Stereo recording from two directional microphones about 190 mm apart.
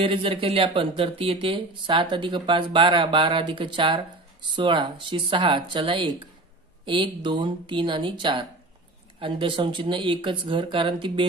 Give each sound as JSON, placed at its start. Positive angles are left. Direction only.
{"t": 0.0, "sound": "speech", "side_deg": -30}